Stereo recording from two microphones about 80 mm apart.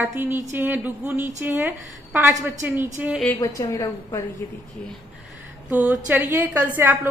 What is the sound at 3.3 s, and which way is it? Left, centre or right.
Speech, left.